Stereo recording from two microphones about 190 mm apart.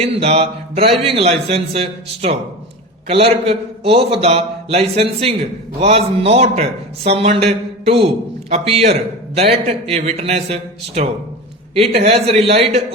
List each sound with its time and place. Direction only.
0.0 s a man's voice: 30° right (ahead or behind)